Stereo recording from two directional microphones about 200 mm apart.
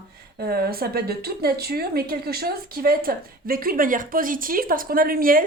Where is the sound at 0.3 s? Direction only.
50° right (ahead or behind).